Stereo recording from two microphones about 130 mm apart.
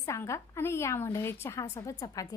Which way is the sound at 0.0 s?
25° left (ahead or behind).